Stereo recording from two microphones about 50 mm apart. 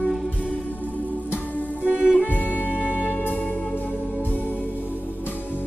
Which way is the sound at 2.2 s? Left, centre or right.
Left.